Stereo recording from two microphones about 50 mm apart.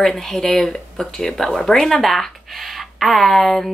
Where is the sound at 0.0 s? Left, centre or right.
Centre.